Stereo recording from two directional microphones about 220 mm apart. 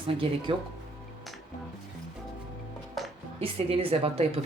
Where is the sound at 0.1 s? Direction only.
25° right (ahead or behind).